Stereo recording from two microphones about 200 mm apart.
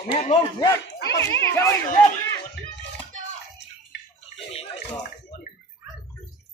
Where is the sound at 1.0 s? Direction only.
60° left (ahead or behind).